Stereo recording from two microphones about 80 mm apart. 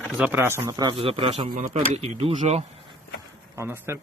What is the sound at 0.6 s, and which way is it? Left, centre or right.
Speech, right.